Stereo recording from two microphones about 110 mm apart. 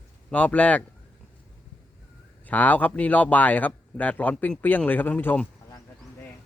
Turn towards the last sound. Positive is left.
turn(degrees=20)  # may be behind; listen again after turning